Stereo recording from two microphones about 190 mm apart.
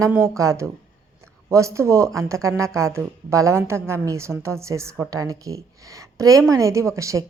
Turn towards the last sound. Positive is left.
turn(degrees=-15)  # may be behind; listen again after turning